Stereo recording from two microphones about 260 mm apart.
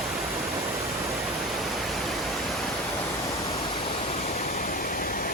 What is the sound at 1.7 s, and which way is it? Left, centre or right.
Pink noise, centre.